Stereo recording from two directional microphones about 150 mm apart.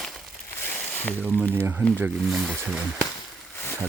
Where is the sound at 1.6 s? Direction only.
15° right (ahead or behind).